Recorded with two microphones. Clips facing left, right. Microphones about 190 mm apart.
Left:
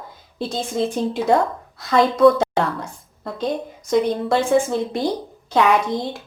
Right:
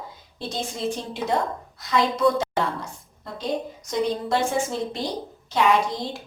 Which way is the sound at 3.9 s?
55° left (ahead or behind).